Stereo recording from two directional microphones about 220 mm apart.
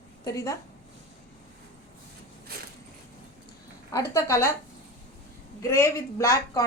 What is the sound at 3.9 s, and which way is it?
Speech, 15° left (ahead or behind).